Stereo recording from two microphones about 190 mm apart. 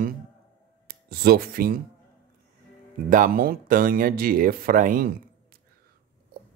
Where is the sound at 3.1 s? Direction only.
45° right (ahead or behind).